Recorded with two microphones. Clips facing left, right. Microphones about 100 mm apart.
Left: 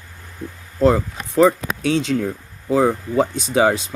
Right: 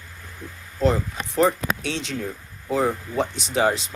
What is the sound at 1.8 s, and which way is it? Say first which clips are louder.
Speech: left 9 dB; 50° left (ahead or behind).